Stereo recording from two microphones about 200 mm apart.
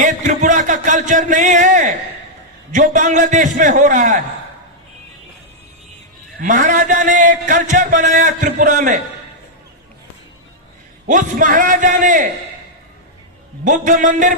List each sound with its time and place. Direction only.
0.0 s a sound: 40° right (ahead or behind)
2.7 s a man's voice: 40° right (ahead or behind)
6.4 s a man's voice: 40° right (ahead or behind)
11.0 s a man's voice: 40° right (ahead or behind)
13.7 s a man's voice: 40° right (ahead or behind)